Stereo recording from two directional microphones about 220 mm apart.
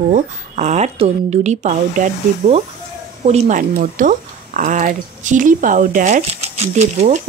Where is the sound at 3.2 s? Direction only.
30° right (ahead or behind).